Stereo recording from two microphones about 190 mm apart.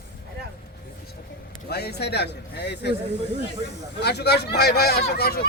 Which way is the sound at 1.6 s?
60° left (ahead or behind).